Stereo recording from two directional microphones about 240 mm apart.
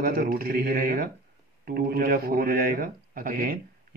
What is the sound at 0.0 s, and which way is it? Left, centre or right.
Speech, right.